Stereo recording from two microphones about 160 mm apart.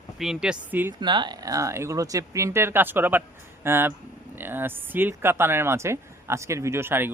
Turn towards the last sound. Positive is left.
turn(degrees=-15)  # may be behind; listen again after turning